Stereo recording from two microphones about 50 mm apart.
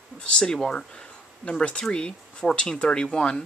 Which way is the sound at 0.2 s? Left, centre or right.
Centre.